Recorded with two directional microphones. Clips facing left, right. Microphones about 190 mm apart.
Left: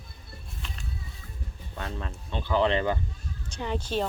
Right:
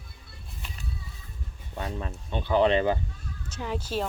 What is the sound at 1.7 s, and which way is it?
Speech, 15° right (ahead or behind).